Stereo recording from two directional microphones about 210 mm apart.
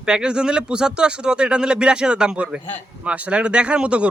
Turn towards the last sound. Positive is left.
turn(degrees=-5)  # may be behind; listen again after turning